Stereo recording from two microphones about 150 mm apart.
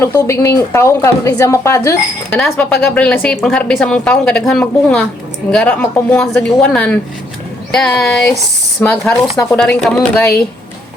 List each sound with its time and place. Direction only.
0.0 s a woman's voice: 20° left (ahead or behind)
2.4 s a woman's voice: 5° left (ahead or behind)